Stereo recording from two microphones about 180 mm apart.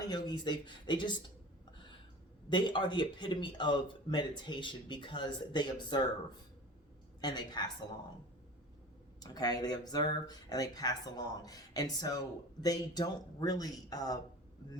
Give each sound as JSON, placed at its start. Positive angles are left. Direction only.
{"t": 0.1, "sound": "speech", "side_deg": 25}
{"t": 2.5, "sound": "speech", "side_deg": 25}
{"t": 7.2, "sound": "speech", "side_deg": 25}
{"t": 9.2, "sound": "speech", "side_deg": 20}